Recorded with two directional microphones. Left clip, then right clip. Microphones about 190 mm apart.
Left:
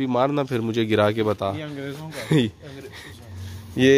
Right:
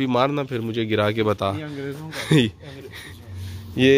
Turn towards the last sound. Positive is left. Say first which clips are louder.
# even
turn(degrees=20)  # may be behind; listen again after turning